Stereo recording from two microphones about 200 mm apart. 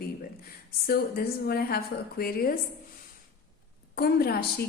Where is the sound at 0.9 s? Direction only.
50° left (ahead or behind).